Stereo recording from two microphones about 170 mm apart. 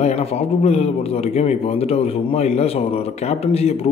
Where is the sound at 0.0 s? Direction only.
40° left (ahead or behind).